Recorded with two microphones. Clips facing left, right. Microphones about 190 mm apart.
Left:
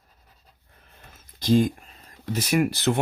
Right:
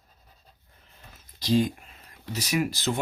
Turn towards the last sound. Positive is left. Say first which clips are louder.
# left 5 dB
turn(degrees=60)  # may be behind; listen again after turning